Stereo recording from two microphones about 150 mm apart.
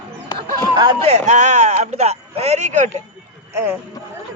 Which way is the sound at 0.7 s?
30° right (ahead or behind).